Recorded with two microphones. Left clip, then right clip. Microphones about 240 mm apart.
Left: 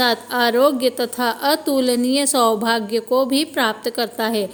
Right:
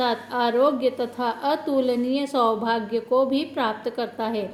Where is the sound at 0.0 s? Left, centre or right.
Left.